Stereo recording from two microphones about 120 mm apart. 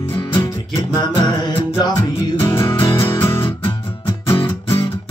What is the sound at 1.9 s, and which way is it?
Music, 35° left (ahead or behind).